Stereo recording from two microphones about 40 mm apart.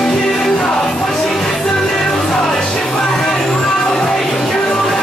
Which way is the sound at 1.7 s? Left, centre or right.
Centre.